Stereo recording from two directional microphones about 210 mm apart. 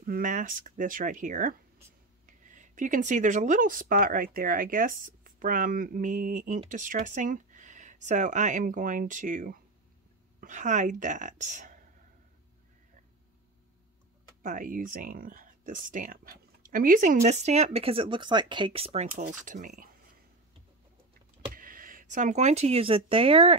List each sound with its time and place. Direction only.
0.0 s speech: 40° right (ahead or behind)
14.4 s speech: 40° right (ahead or behind)
21.5 s speech: 40° right (ahead or behind)